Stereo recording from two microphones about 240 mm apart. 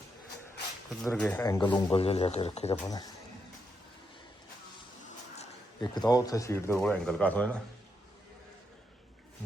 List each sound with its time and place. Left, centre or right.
1.0 s a man's voice: centre; by 2.7 s left
2.8 s speech: centre
5.4 s speech: centre